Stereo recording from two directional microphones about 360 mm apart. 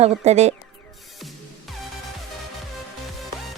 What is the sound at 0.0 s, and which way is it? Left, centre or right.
Speech, centre.